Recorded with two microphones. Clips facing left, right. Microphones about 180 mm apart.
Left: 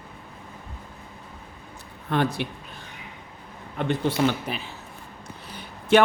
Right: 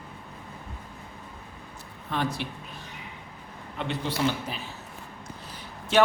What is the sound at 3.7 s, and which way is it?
Speech, 50° left (ahead or behind).